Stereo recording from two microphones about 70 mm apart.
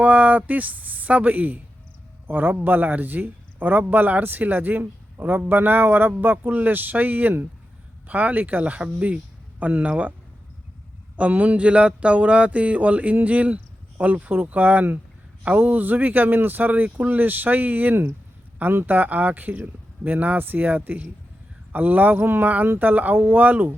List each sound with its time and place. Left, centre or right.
0.0 s a man's voice: right
11.2 s speech: right